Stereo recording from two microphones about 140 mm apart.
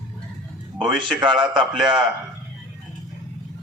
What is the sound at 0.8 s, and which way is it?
Speech, 35° right (ahead or behind).